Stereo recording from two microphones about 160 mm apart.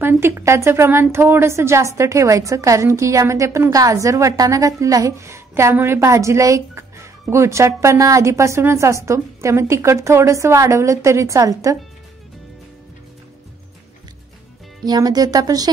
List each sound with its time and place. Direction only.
0.0 s a woman's voice: 15° right (ahead or behind)
14.9 s speech: 25° right (ahead or behind)